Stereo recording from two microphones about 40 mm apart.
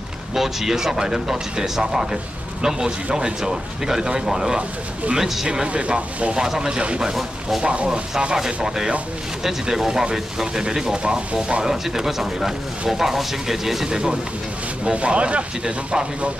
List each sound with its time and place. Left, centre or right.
0.3 s speech: centre
5.7 s speech: right
7.0 s speech: centre
7.6 s speech: right
8.6 s speech: centre
11.6 s speech: centre
14.9 s speech: right